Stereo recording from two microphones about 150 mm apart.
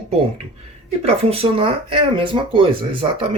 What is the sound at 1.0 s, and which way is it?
Speech, 40° right (ahead or behind).